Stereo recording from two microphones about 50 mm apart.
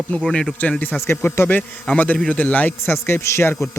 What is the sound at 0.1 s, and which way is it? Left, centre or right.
Speech, left.